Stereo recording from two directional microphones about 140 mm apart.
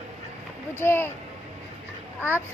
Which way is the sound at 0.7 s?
15° left (ahead or behind).